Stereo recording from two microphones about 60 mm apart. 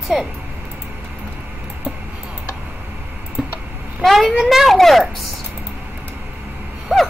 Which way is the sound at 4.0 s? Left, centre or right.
Centre.